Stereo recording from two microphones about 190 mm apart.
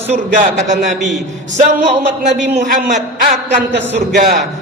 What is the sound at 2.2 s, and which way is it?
Speech, 40° right (ahead or behind).